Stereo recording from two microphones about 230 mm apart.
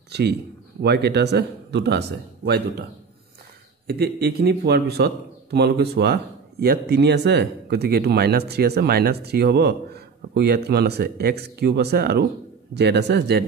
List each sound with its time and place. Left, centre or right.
0.1 s a man's voice: right